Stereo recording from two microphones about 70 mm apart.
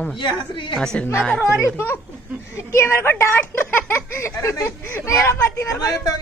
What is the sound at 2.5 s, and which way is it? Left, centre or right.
Speech, left.